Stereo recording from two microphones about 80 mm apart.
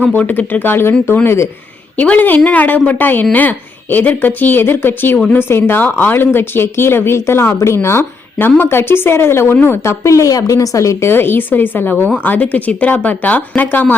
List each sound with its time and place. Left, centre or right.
0.0 s a woman's voice: centre
2.0 s a woman's voice: centre; by 11.1 s left
11.1 s a woman's voice: left